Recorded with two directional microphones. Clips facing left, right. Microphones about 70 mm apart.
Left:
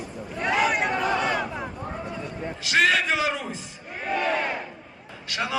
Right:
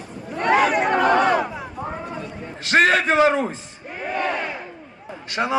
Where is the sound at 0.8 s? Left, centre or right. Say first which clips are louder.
Right 7 dB; right.